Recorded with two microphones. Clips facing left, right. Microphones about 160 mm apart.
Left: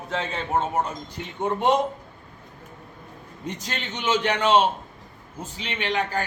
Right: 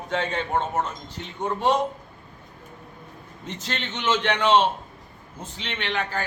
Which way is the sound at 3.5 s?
10° left (ahead or behind).